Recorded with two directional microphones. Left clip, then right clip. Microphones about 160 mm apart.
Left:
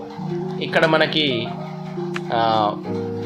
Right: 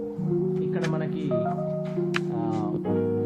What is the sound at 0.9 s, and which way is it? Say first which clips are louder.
Speech: left 14 dB; 20° left (ahead or behind).